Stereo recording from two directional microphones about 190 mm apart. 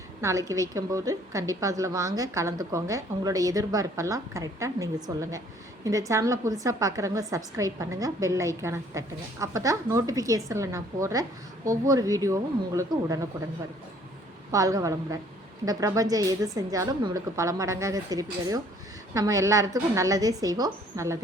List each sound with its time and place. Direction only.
0.2 s a woman's voice: 15° right (ahead or behind)
14.5 s a woman's voice: 20° right (ahead or behind)